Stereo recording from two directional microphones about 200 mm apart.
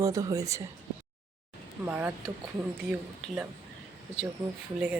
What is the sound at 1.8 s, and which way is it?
Speech, 10° right (ahead or behind).